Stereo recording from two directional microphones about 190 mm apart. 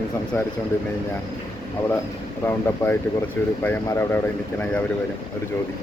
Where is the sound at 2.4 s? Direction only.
10° left (ahead or behind).